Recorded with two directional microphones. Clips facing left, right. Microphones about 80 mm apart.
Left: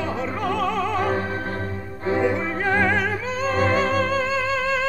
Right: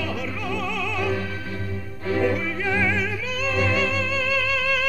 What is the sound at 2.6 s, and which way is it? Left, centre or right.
Music, left.